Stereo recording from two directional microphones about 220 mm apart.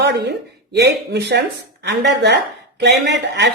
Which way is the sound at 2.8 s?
50° right (ahead or behind).